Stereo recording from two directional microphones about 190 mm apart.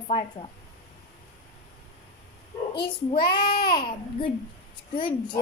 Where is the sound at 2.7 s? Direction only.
25° left (ahead or behind).